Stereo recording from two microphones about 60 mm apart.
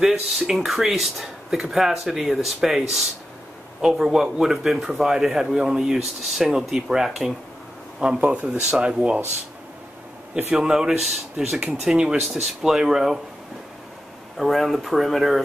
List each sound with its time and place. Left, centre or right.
0.0 s speech: centre
3.8 s speech: centre
8.2 s speech: right
10.3 s speech: centre
14.3 s speech: centre